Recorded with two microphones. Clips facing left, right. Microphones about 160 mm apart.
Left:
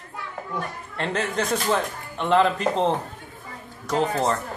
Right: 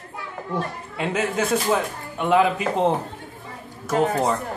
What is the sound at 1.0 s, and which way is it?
Speech, 5° right (ahead or behind).